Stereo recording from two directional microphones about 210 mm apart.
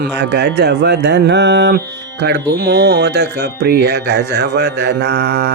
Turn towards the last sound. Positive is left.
turn(degrees=-50)  # may be behind; listen again after turning